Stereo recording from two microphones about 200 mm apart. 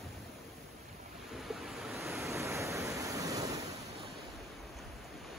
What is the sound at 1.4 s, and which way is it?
Waves, centre (ahead or behind).